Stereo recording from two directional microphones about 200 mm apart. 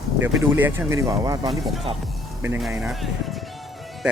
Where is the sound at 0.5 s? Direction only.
10° right (ahead or behind).